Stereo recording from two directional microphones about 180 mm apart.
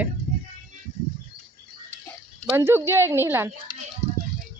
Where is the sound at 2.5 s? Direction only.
10° right (ahead or behind).